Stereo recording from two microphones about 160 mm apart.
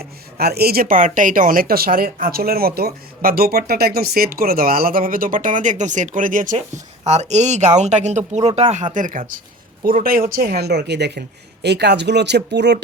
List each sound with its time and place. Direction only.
0.0 s speech: 80° right; by 6.6 s 55° right (ahead or behind)
7.0 s speech: 45° right (ahead or behind); by 12.8 s 90° right